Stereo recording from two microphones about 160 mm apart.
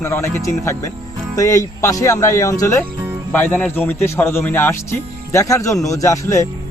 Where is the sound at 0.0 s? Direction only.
20° left (ahead or behind).